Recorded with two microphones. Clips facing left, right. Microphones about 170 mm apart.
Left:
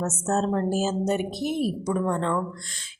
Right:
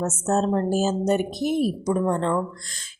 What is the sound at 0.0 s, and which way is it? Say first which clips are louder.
Speech: right 2 dB; 30° right (ahead or behind).